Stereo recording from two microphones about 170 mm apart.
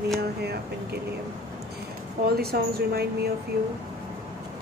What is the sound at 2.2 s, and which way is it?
Speech, 65° right (ahead or behind).